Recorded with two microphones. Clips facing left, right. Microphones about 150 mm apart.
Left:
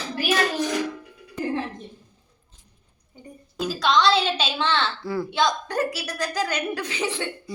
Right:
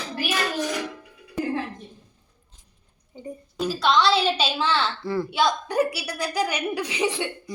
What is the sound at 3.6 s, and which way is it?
A woman's voice, 5° right (ahead or behind).